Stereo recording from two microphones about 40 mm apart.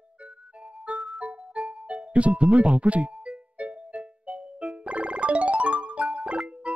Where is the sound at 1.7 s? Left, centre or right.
Right.